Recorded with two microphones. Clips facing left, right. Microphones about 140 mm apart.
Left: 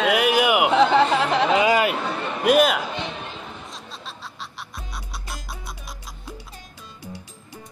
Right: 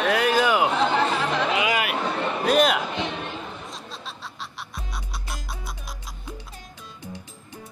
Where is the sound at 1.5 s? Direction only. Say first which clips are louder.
Left 6 dB; 35° left (ahead or behind).